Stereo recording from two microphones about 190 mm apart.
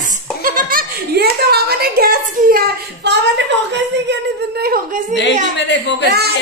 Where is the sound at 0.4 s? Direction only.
45° right (ahead or behind).